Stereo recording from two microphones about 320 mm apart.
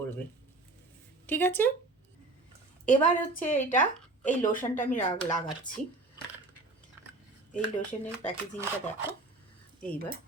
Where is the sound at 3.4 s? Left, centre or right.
Centre.